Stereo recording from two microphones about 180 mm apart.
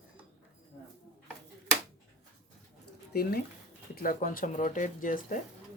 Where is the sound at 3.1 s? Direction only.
60° left (ahead or behind).